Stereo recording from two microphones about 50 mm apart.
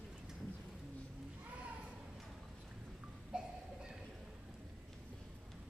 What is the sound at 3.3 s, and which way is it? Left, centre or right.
Music, centre.